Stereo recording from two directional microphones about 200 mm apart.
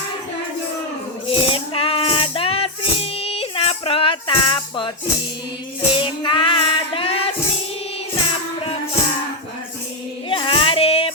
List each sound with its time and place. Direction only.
1.3 s music: 25° left (ahead or behind)
5.9 s music: 25° left (ahead or behind)
10.2 s child singing: 25° left (ahead or behind)